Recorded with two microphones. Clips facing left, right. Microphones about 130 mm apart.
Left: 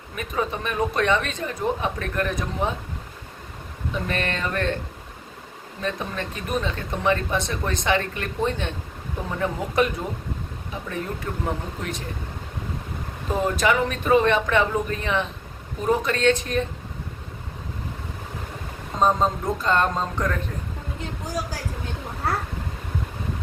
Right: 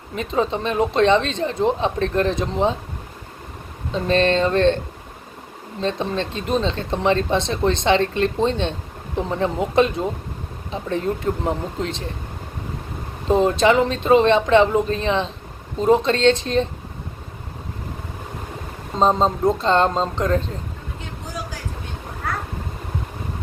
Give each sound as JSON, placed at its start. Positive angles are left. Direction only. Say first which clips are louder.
{"t": 0.2, "sound": "speech", "louder": "right 5 dB", "side_deg": -25}
{"t": 3.9, "sound": "speech", "louder": "right 10 dB", "side_deg": -25}
{"t": 5.8, "sound": "speech", "louder": "right 6 dB", "side_deg": -25}
{"t": 13.2, "sound": "speech", "louder": "right 6 dB", "side_deg": -25}
{"t": 18.9, "sound": "speech", "louder": "right 3 dB", "side_deg": -25}